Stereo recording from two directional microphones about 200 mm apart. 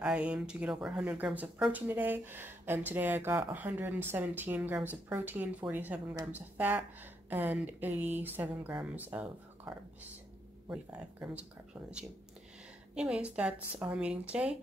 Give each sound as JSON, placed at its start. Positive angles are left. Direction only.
{"t": 0.0, "sound": "speech", "side_deg": -5}
{"t": 12.9, "sound": "speech", "side_deg": -5}